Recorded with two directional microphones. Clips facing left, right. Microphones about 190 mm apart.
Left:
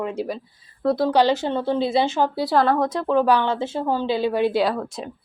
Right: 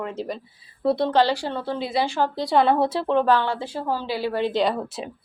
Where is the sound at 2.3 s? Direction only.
5° left (ahead or behind).